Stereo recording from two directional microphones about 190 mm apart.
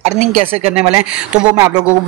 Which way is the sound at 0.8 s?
10° right (ahead or behind).